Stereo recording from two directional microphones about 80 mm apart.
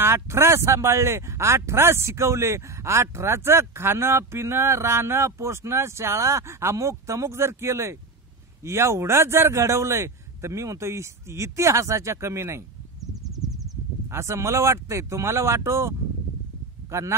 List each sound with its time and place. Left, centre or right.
0.0 s speech: right
13.0 s a sound: centre
14.0 s speech: right
16.9 s speech: right